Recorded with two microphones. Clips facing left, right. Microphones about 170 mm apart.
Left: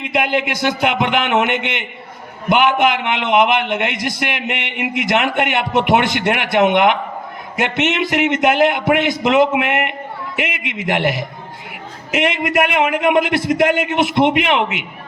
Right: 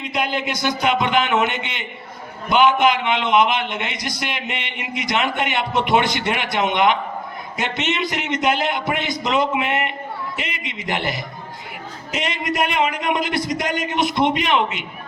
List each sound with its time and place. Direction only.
0.0 s a man's voice: 60° left (ahead or behind)